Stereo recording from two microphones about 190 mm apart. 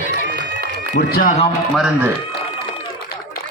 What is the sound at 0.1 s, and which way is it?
Run, 60° right (ahead or behind).